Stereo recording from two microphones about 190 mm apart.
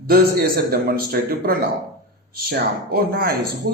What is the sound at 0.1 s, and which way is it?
Speech, 50° right (ahead or behind).